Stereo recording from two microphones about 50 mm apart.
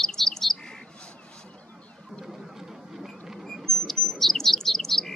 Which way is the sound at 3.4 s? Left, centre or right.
Centre.